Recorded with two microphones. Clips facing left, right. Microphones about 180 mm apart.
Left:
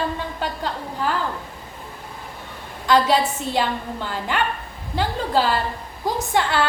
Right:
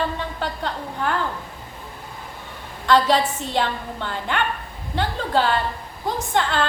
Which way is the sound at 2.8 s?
10° left (ahead or behind).